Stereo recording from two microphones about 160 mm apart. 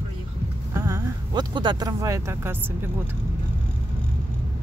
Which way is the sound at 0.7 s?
20° right (ahead or behind).